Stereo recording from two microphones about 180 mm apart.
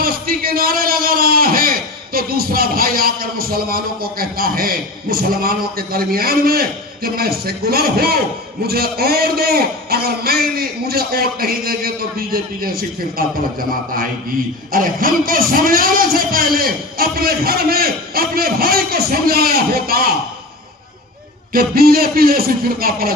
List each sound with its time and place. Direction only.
0.0 s a man's voice: 55° right (ahead or behind)
21.5 s a man's voice: 55° right (ahead or behind)